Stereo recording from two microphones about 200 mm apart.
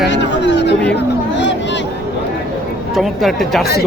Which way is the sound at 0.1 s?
60° left (ahead or behind).